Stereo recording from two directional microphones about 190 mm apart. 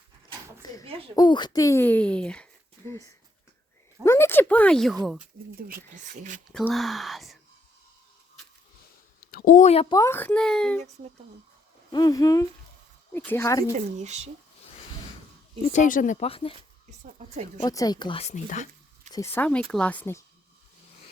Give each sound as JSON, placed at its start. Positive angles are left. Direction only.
{"t": 0.9, "sound": "speech", "side_deg": -30}
{"t": 1.1, "sound": "speech", "side_deg": 20}
{"t": 4.0, "sound": "speech", "side_deg": 15}
{"t": 5.5, "sound": "speech", "side_deg": -50}
{"t": 6.5, "sound": "a child's voice", "side_deg": 5}
{"t": 9.3, "sound": "a woman's voice", "side_deg": 45}
{"t": 9.9, "sound": "a child's voice", "side_deg": 15}
{"t": 11.9, "sound": "speech", "side_deg": 20}
{"t": 13.7, "sound": "speech", "side_deg": -35}
{"t": 15.7, "sound": "speech", "side_deg": 45}
{"t": 16.2, "sound": "speech", "side_deg": 30}
{"t": 17.0, "sound": "speech", "side_deg": -40}
{"t": 17.6, "sound": "speech", "side_deg": 20}
{"t": 19.1, "sound": "speech", "side_deg": 10}